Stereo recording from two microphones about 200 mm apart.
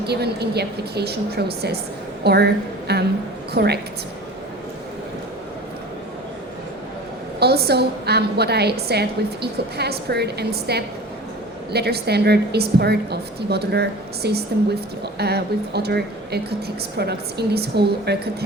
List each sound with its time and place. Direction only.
0.0 s a woman's voice: 55° right (ahead or behind)
7.3 s a woman's voice: 50° right (ahead or behind)